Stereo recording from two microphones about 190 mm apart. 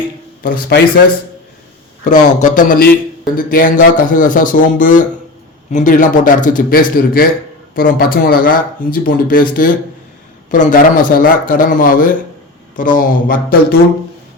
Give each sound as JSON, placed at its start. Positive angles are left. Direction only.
{"t": 0.4, "sound": "speech", "side_deg": 50}
{"t": 2.0, "sound": "speech", "side_deg": 40}